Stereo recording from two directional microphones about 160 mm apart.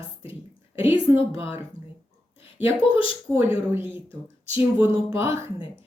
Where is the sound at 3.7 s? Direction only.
15° right (ahead or behind).